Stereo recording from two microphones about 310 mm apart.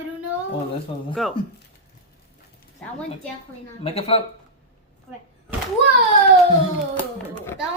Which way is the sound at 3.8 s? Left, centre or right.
Centre.